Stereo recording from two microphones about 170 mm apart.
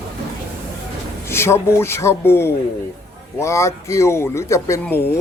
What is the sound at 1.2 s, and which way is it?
Speech, 15° left (ahead or behind).